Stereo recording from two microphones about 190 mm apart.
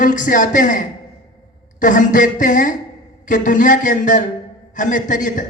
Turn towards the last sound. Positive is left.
turn(degrees=45)  # may be behind; listen again after turning